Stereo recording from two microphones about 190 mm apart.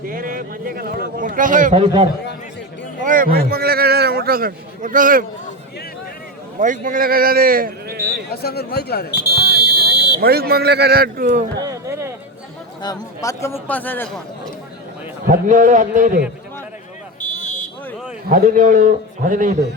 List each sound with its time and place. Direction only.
0.0 s a man's voice: 45° right (ahead or behind)
1.7 s a man's voice: 30° right (ahead or behind)
3.0 s a sound: 45° right (ahead or behind)
6.6 s speech: 45° right (ahead or behind)
8.3 s buzzer: 55° left (ahead or behind)
10.2 s a man's voice: 55° right (ahead or behind)
11.6 s a sound: 15° right (ahead or behind)
12.8 s a man's voice: 20° left (ahead or behind)
15.3 s a man's voice: 45° right (ahead or behind)
17.2 s a sound: 40° left (ahead or behind)
18.3 s a man's voice: 45° right (ahead or behind)